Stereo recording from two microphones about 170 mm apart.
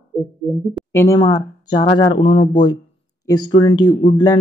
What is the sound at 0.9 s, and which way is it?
A man's voice, 15° left (ahead or behind).